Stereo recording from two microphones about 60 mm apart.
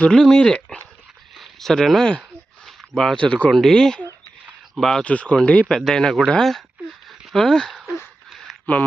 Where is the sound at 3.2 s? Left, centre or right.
Left.